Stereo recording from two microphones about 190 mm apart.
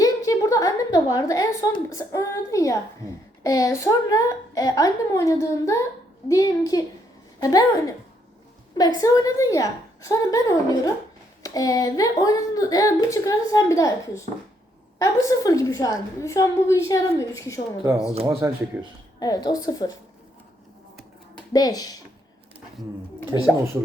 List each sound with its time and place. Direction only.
0.0 s a woman's voice: 15° left (ahead or behind)
9.0 s a woman's voice: 20° left (ahead or behind)
18.3 s speech: 15° right (ahead or behind)
19.2 s a woman's voice: 20° left (ahead or behind)
21.5 s a woman's voice: 20° left (ahead or behind)
23.3 s speech: 20° right (ahead or behind)